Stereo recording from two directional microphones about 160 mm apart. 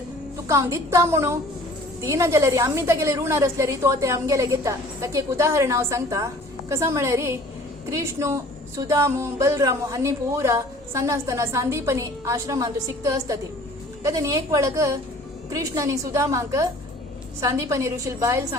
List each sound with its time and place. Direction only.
0.4 s a woman's voice: 20° right (ahead or behind)